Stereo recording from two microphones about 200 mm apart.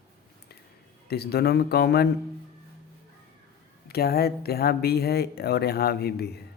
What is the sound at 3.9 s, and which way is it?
Speech, 50° left (ahead or behind).